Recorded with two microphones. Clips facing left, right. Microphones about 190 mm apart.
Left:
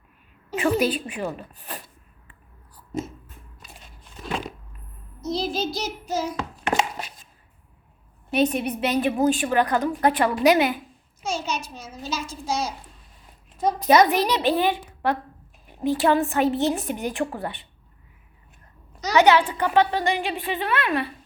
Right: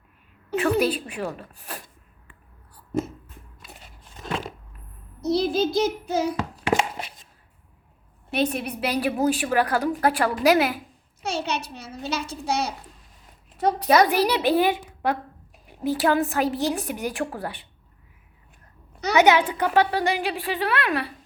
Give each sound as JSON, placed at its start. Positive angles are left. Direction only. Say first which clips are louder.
{"t": 0.6, "sound": "a woman's voice", "louder": "even", "side_deg": 0}
{"t": 1.5, "sound": "speech", "louder": "left 1 dB", "side_deg": -10}
{"t": 5.2, "sound": "child singing", "louder": "right 4 dB", "side_deg": -65}
{"t": 8.3, "sound": "a woman's voice", "louder": "left 3 dB", "side_deg": -5}
{"t": 11.2, "sound": "a child's voice", "louder": "right 1 dB", "side_deg": -65}
{"t": 14.2, "sound": "a woman's voice", "louder": "right 1 dB", "side_deg": -10}
{"t": 19.1, "sound": "speech", "louder": "left 1 dB", "side_deg": -15}